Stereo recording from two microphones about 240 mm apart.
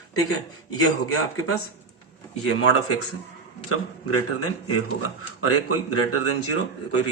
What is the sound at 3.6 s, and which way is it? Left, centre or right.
A man's voice, left.